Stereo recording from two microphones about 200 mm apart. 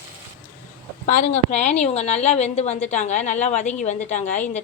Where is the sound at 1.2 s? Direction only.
35° left (ahead or behind).